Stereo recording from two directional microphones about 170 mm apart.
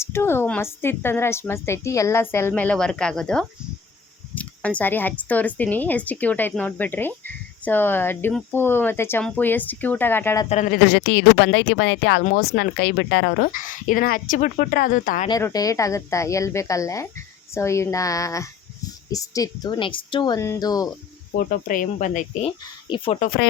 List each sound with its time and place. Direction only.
0.0 s speech: 15° left (ahead or behind)
10.7 s speech: 90° left; by 15.3 s 50° left (ahead or behind)
15.3 s speech: 20° left (ahead or behind)
21.3 s speech: 55° left (ahead or behind)
22.9 s speech: 25° left (ahead or behind)